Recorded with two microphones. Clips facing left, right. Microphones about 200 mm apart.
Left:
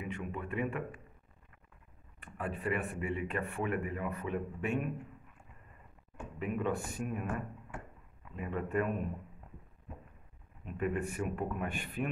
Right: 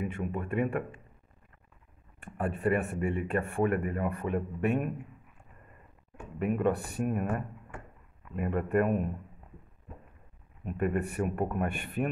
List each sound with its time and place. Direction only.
0.0 s speech: 45° right (ahead or behind)
2.1 s speech: 50° right (ahead or behind)
6.4 s speech: 55° right (ahead or behind)
8.4 s speech: 55° right (ahead or behind)
10.6 s speech: 55° right (ahead or behind)